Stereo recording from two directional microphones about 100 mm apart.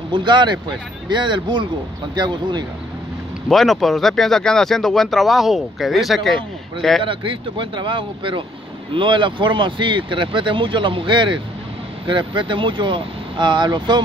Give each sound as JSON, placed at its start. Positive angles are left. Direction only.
{"t": 0.1, "sound": "speech", "side_deg": -50}
{"t": 3.4, "sound": "speech", "side_deg": 0}
{"t": 7.0, "sound": "speech", "side_deg": -60}